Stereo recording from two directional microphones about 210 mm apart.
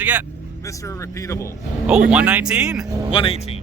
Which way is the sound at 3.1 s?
25° left (ahead or behind).